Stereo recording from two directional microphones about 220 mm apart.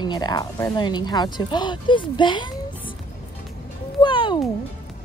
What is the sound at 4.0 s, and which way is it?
Music, 20° left (ahead or behind).